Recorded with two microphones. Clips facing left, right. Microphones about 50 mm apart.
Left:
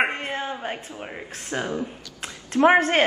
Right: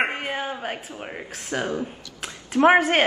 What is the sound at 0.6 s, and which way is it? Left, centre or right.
Speech, centre.